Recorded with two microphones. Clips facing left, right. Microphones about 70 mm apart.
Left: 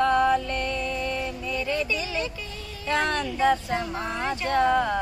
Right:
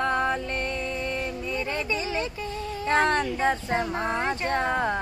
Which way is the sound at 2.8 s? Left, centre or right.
Right.